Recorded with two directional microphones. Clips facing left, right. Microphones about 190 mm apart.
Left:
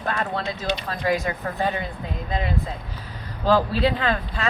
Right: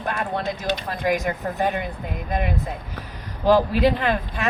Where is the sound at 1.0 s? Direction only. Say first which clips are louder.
Right 1 dB; 20° right (ahead or behind).